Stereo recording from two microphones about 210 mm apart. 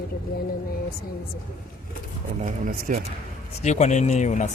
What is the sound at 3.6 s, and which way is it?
Speech, 35° left (ahead or behind).